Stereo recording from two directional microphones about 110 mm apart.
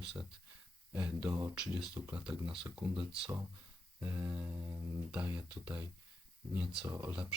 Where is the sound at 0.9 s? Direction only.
15° right (ahead or behind).